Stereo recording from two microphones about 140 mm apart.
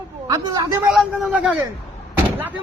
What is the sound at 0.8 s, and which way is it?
Speech, 5° right (ahead or behind).